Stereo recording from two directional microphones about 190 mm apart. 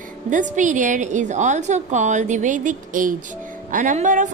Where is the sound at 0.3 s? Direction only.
40° right (ahead or behind).